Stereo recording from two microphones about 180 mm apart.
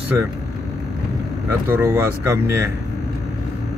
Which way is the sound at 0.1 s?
15° right (ahead or behind).